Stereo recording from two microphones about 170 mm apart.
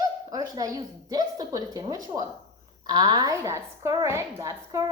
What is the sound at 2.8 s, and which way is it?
A woman's voice, 25° right (ahead or behind).